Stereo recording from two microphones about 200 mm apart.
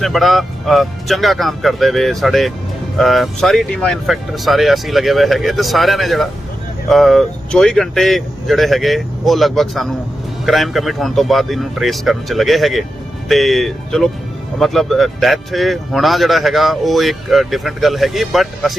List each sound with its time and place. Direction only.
0.0 s speech: centre (ahead or behind)